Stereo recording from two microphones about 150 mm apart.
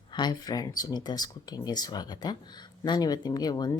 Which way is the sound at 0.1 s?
30° left (ahead or behind).